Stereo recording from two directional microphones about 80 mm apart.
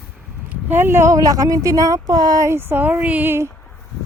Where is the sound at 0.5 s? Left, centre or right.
Right.